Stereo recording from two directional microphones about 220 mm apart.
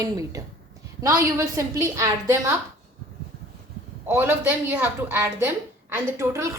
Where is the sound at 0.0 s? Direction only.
15° right (ahead or behind).